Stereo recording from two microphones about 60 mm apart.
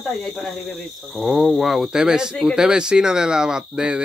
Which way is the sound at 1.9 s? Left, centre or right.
Centre.